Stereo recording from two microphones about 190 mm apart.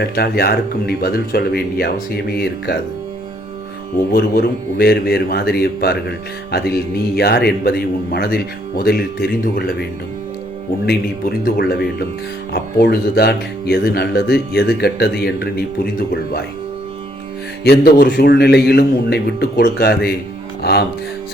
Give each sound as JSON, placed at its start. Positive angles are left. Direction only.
{"t": 0.0, "sound": "a man's voice", "side_deg": 55}
{"t": 4.1, "sound": "a man's voice", "side_deg": 55}
{"t": 10.8, "sound": "a man's voice", "side_deg": 50}
{"t": 17.6, "sound": "a man's voice", "side_deg": 55}